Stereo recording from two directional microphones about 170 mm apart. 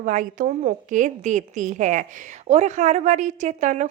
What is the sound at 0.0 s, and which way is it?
A woman's voice, 50° right (ahead or behind).